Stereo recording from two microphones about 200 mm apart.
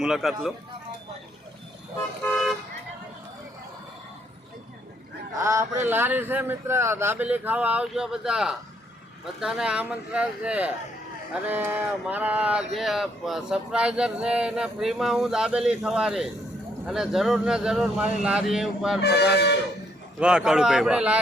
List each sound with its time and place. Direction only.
0.0 s speech: centre (ahead or behind)
5.4 s speech: 15° right (ahead or behind)
19.0 s speech: 55° left (ahead or behind)
20.1 s speech: 5° right (ahead or behind)